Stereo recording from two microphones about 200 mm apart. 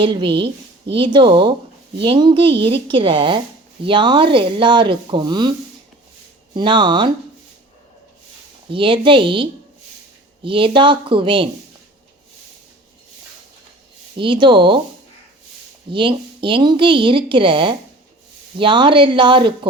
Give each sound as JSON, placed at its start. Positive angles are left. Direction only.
{"t": 0.0, "sound": "a woman's voice", "side_deg": -25}
{"t": 8.7, "sound": "a woman's voice", "side_deg": -25}
{"t": 14.2, "sound": "a woman's voice", "side_deg": -25}
{"t": 15.9, "sound": "a woman's voice", "side_deg": -25}